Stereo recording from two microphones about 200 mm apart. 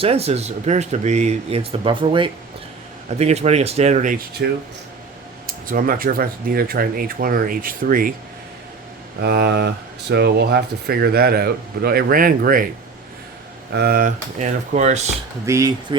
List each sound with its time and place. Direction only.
0.0 s speech: 30° right (ahead or behind)
5.6 s speech: 45° right (ahead or behind)
9.2 s speech: 55° right (ahead or behind)
13.7 s speech: 50° right (ahead or behind); by 15.1 s 35° right (ahead or behind)
15.4 s speech: 15° right (ahead or behind)